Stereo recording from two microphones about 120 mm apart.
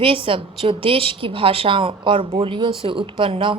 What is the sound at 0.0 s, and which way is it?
A woman's voice, 45° right (ahead or behind).